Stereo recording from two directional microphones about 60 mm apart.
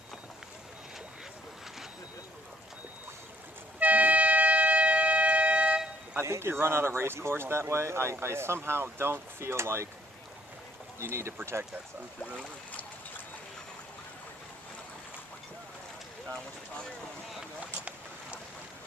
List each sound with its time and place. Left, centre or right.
3.8 s siren: right
6.1 s speech: right
11.0 s speech: right
12.2 s speech: centre